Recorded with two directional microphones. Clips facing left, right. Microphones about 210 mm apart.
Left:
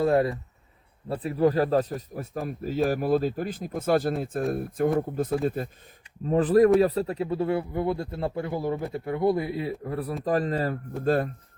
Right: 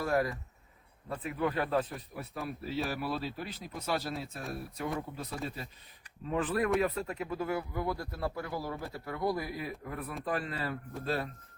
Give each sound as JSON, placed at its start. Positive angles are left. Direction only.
{"t": 0.0, "sound": "speech", "side_deg": 30}
{"t": 6.2, "sound": "speech", "side_deg": 40}